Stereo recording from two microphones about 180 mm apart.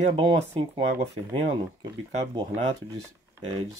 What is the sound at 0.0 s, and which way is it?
Speech, 35° right (ahead or behind).